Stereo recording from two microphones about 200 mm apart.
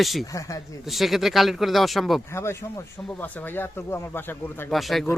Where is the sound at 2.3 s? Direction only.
15° left (ahead or behind).